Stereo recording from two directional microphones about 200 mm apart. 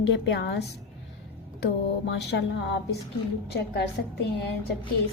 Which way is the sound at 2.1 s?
60° left (ahead or behind).